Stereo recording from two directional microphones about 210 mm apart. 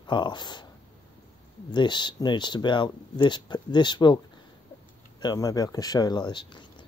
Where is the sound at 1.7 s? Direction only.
20° left (ahead or behind).